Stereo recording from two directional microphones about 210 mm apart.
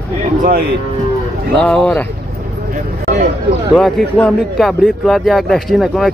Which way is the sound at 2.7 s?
40° right (ahead or behind).